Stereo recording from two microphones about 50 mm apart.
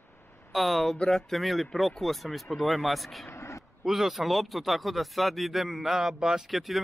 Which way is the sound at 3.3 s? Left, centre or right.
Left.